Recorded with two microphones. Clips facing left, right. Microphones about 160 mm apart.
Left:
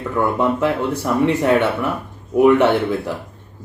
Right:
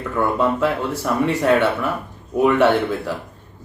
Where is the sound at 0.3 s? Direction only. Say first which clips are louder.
Left 1 dB; 15° left (ahead or behind).